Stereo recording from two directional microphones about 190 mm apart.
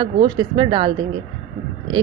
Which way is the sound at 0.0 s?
25° right (ahead or behind).